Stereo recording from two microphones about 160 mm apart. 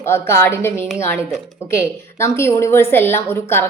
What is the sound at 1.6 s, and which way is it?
A woman's voice, 15° left (ahead or behind).